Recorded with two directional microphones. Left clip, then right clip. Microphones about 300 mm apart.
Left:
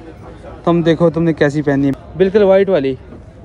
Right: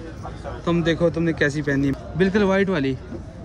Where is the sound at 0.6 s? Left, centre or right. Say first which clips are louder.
Left 8 dB; centre.